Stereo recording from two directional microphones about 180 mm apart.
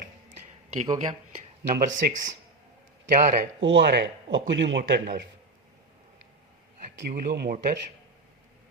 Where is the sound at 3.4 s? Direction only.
90° right; by 5.0 s 70° right (ahead or behind).